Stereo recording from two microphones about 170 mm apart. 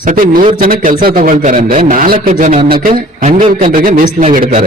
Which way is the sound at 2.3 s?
45° right (ahead or behind).